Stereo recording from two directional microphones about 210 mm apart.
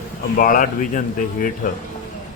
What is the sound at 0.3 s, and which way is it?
Speech, 40° left (ahead or behind).